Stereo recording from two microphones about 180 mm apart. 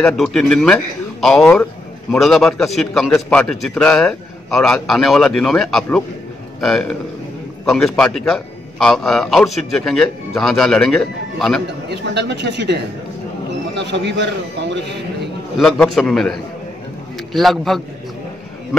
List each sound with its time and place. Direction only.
0.0 s a man's voice: 5° left (ahead or behind)
11.9 s a man's voice: 70° right (ahead or behind)
15.6 s a man's voice: centre (ahead or behind)